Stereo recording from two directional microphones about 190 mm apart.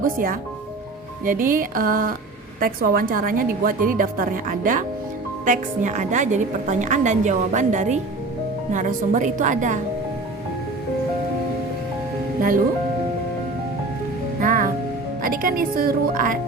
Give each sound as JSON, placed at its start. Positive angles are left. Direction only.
{"t": 0.0, "sound": "a woman's voice", "side_deg": -50}
{"t": 12.4, "sound": "speech", "side_deg": -45}
{"t": 14.4, "sound": "music", "side_deg": -45}
{"t": 15.2, "sound": "a woman's voice", "side_deg": -50}